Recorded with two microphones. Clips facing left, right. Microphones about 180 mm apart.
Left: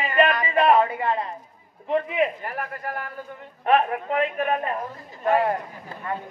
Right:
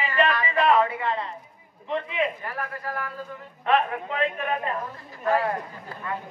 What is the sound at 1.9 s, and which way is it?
Speech, 30° left (ahead or behind).